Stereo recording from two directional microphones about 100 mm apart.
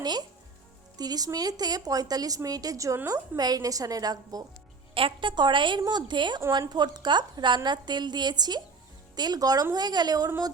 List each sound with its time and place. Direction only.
0.0 s a woman's voice: 45° right (ahead or behind)
4.9 s a woman's voice: 55° right (ahead or behind); by 10.3 s 40° right (ahead or behind)